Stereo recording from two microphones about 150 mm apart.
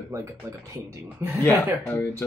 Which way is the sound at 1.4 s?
20° left (ahead or behind).